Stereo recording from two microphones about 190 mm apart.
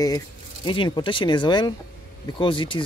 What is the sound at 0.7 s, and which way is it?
Speech, 25° left (ahead or behind).